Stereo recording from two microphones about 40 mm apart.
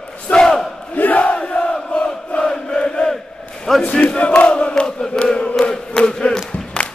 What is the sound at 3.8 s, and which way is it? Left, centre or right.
Crowd, left.